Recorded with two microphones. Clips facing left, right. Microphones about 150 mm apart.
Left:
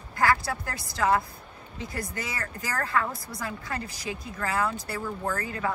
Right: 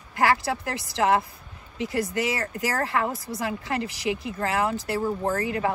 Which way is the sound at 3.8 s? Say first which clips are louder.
Right 8 dB; 90° right.